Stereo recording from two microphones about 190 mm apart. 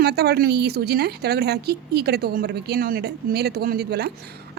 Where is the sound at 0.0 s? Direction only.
60° right (ahead or behind).